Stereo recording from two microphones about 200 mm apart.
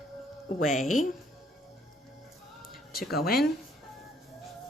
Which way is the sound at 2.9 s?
50° left (ahead or behind).